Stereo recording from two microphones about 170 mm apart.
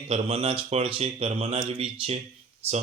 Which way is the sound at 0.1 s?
35° right (ahead or behind).